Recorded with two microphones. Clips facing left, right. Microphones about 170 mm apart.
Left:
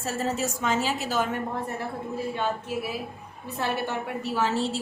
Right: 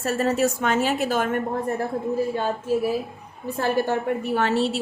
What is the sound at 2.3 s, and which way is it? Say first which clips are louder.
A woman's voice: right 5 dB; 40° right (ahead or behind).